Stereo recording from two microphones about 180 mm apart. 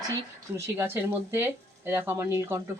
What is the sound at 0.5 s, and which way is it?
Speech, 15° right (ahead or behind).